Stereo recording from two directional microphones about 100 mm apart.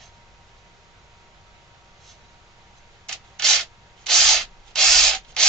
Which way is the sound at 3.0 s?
5° left (ahead or behind).